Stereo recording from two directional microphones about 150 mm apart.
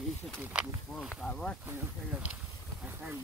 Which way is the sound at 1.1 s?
5° left (ahead or behind).